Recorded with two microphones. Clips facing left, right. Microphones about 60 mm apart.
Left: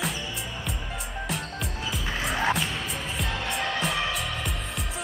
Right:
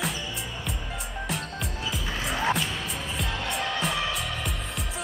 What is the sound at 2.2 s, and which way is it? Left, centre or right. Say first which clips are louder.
Music: left 1 dB; centre.